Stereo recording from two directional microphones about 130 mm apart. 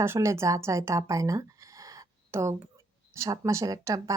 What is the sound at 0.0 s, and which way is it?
Speech, 20° right (ahead or behind).